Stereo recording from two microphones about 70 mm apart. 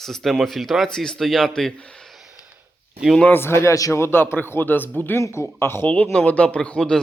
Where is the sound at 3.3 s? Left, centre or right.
Left.